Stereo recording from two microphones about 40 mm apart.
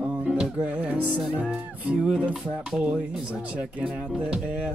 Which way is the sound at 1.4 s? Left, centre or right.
Right.